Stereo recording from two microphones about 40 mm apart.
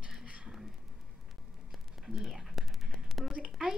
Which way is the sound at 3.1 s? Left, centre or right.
Centre.